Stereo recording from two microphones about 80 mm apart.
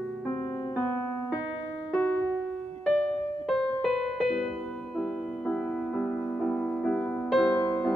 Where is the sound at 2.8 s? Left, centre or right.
Centre.